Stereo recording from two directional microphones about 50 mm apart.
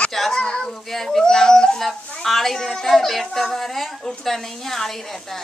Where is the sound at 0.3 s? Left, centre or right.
Centre.